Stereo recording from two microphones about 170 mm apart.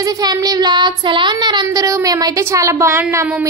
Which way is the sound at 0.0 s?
20° right (ahead or behind).